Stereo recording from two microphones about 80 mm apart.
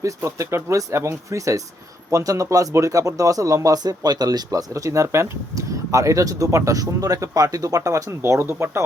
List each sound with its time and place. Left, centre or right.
0.2 s speech: right